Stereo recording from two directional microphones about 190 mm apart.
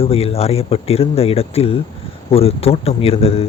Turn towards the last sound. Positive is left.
turn(degrees=30)  # may be behind; listen again after turning